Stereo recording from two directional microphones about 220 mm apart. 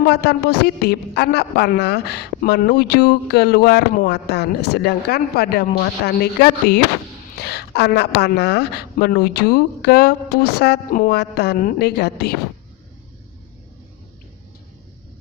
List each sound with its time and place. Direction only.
0.1 s a man's voice: 45° left (ahead or behind)